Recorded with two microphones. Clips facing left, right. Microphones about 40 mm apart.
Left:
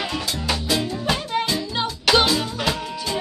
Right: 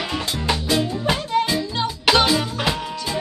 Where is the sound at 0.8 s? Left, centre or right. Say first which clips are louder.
Right 2 dB; centre.